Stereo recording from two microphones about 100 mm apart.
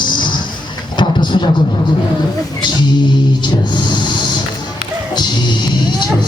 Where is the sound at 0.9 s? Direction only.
50° left (ahead or behind).